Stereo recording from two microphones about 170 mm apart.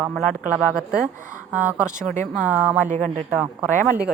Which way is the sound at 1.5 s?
10° right (ahead or behind).